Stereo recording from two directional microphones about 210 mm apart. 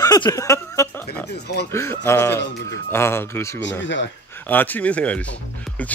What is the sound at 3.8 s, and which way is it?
Speech, 60° left (ahead or behind).